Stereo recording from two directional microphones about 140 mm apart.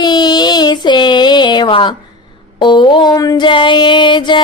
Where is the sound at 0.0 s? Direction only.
30° left (ahead or behind).